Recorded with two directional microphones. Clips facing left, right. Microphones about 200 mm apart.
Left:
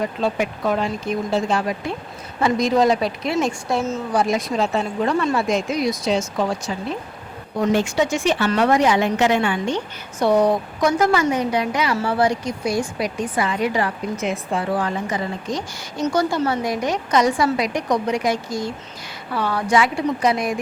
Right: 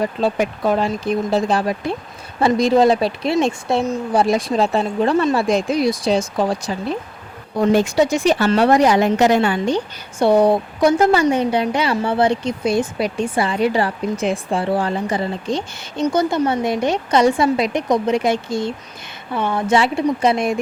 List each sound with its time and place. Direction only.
0.2 s a woman's voice: 35° right (ahead or behind)